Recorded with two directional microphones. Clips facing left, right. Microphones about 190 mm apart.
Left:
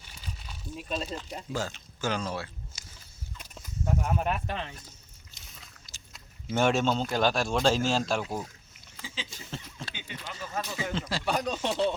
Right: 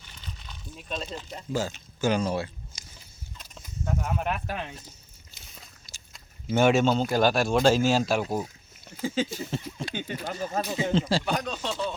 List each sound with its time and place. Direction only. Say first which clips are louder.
0.1 s a sound: left 1 dB; 10° left (ahead or behind)
1.5 s speech: right 5 dB; 5° right (ahead or behind)
3.3 s a sound: left 1 dB; 5° left (ahead or behind)
4.5 s speech: right 1 dB; 15° right (ahead or behind)
6.1 s speech: right 4 dB; centre (ahead or behind)
8.9 s a sound: right 14 dB; 45° right (ahead or behind)
9.5 s speech: right 8 dB; 10° right (ahead or behind)
9.9 s speech: right 11 dB; 45° right (ahead or behind)
10.7 s speech: right 9 dB; 25° right (ahead or behind)
11.3 s speech: even; centre (ahead or behind)
11.5 s speech: left 2 dB; 20° left (ahead or behind)